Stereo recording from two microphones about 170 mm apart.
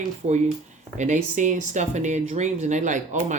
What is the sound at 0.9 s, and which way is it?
Speech, 45° right (ahead or behind).